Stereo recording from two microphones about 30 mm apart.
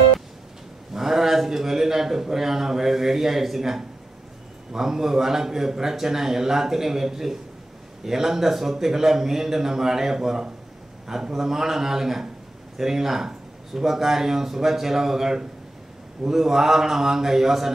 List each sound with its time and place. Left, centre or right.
0.9 s a man's voice: centre